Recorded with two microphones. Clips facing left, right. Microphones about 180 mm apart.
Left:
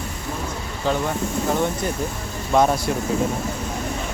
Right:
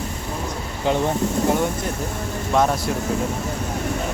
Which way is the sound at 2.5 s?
Centre (ahead or behind).